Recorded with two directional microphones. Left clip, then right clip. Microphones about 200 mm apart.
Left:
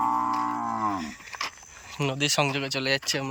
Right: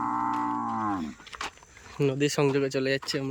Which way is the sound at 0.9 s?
5° right (ahead or behind).